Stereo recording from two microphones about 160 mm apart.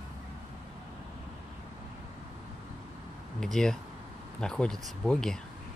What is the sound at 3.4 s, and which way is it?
Speech, 5° left (ahead or behind).